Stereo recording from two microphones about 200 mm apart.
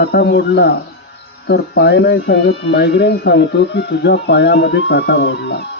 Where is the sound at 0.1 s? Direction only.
60° left (ahead or behind).